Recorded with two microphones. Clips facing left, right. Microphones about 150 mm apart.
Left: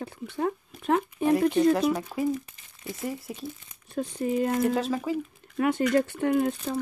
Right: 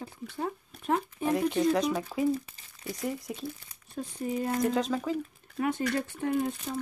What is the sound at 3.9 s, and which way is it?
Speech, 80° left.